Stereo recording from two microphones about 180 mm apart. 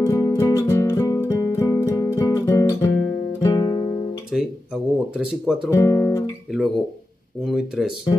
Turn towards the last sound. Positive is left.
turn(degrees=0)  # may be behind; listen again after turning